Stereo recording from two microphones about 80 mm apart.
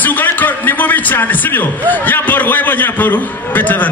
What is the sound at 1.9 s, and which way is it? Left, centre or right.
A man's voice, left.